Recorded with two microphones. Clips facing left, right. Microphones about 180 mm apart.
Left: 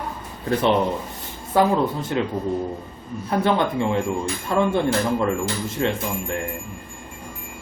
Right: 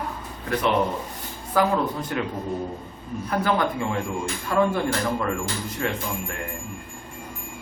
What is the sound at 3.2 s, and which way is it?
Speech, 25° left (ahead or behind).